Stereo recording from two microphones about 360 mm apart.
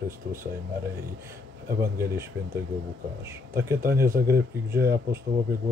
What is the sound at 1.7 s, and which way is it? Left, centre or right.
Speech, centre.